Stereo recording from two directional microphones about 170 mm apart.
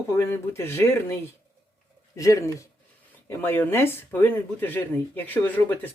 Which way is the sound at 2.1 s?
20° left (ahead or behind).